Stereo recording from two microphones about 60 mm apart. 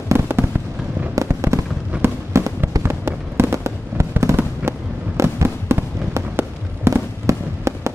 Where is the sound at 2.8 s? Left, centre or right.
Right.